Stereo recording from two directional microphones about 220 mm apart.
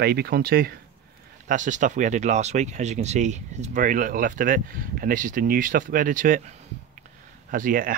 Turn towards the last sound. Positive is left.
turn(degrees=-40)  # may be behind; listen again after turning